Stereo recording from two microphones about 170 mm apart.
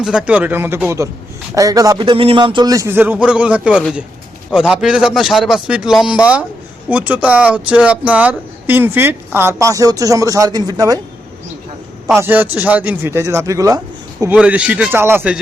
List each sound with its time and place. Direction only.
0.0 s a man's voice: 5° right (ahead or behind); by 11.0 s 20° right (ahead or behind)
12.2 s speech: 10° right (ahead or behind)
14.3 s speech: 5° right (ahead or behind)